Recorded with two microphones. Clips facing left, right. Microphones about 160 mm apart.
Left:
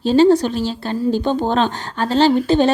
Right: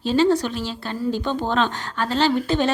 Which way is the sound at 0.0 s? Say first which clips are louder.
Left 6 dB; 35° left (ahead or behind).